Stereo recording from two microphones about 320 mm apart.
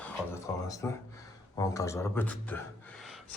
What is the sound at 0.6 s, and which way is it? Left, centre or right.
Speech, centre.